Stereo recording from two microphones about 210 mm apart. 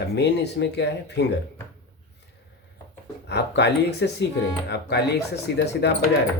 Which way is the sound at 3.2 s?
55° left (ahead or behind).